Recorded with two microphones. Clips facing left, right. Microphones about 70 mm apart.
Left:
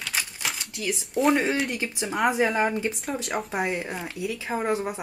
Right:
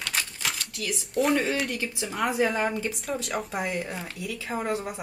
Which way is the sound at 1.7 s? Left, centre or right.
Centre.